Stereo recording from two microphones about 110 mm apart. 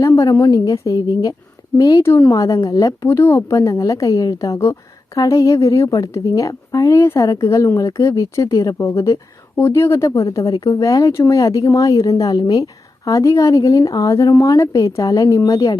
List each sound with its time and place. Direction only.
0.0 s a woman's voice: 30° left (ahead or behind)